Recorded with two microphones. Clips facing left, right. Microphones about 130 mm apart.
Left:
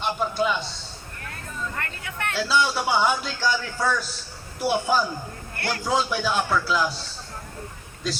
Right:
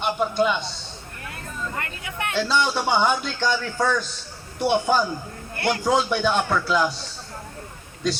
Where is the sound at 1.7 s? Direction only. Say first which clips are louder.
Right 2 dB; 15° right (ahead or behind).